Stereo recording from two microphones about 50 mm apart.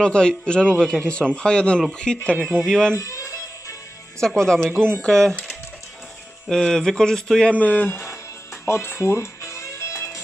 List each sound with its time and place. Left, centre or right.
0.0 s a man's voice: centre
3.0 s music: left
4.4 s a man's voice: centre
6.5 s a man's voice: centre
7.6 s speech: left
8.6 s music: left